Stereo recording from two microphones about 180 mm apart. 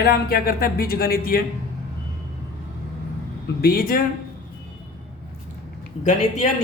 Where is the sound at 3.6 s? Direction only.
55° left (ahead or behind).